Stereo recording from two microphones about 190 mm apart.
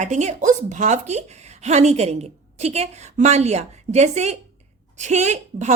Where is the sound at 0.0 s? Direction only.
40° right (ahead or behind).